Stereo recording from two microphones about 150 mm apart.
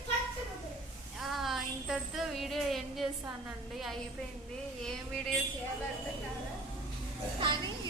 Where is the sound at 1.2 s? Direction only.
Centre (ahead or behind).